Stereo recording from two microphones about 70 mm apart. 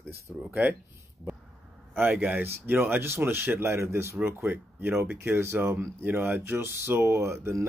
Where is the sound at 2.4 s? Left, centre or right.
Right.